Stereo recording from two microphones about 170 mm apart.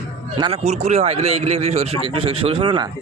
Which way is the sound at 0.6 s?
40° right (ahead or behind).